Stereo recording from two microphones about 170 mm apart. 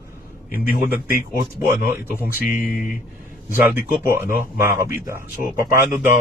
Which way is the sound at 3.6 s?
15° right (ahead or behind).